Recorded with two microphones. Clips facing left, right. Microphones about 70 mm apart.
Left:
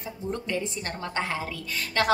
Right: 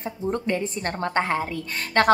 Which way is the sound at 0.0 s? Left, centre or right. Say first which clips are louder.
Right 6 dB; right.